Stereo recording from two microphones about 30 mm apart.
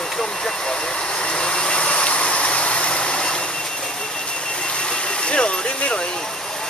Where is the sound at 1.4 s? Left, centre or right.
Left.